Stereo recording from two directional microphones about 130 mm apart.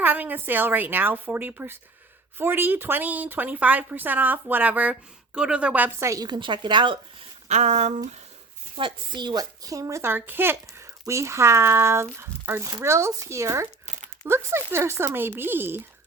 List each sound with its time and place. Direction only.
0.0 s speech: 15° right (ahead or behind)
6.2 s speech: 35° right (ahead or behind)
7.4 s speech: 60° right (ahead or behind)
8.7 s speech: 40° right (ahead or behind); by 15.8 s 15° right (ahead or behind)